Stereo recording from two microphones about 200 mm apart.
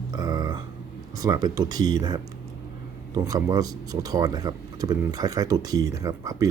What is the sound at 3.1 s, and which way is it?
Speech, 20° right (ahead or behind).